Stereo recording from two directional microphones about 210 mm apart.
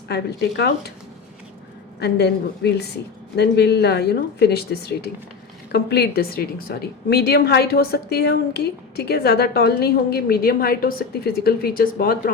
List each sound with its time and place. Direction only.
0.1 s a woman's voice: 55° left (ahead or behind)
2.0 s a woman's voice: 50° left (ahead or behind)